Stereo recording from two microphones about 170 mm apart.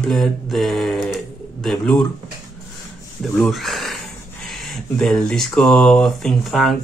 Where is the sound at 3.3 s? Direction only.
Centre (ahead or behind).